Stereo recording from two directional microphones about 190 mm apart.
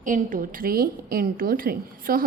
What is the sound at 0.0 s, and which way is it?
A woman's voice, 45° right (ahead or behind).